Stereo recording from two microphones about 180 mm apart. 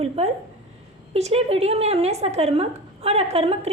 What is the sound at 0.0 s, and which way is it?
A woman's voice, 35° right (ahead or behind).